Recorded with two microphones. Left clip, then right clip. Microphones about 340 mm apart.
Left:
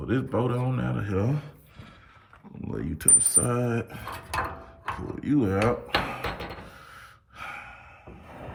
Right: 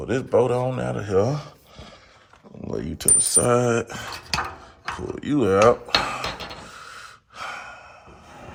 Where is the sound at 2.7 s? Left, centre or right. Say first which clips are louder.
Right 2 dB; centre.